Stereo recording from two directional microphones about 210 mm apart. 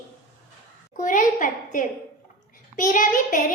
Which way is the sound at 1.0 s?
35° left (ahead or behind).